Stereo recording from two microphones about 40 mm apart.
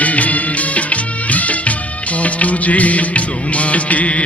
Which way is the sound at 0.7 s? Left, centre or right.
Left.